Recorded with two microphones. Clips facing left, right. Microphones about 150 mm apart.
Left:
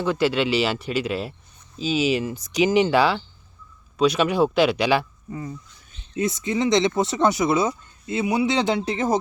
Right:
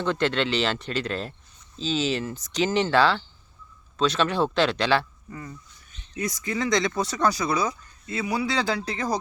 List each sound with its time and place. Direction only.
0.0 s speech: 10° left (ahead or behind); by 9.1 s 25° left (ahead or behind)